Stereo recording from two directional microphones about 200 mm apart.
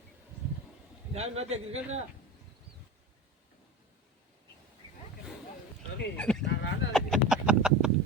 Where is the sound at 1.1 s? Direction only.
30° right (ahead or behind).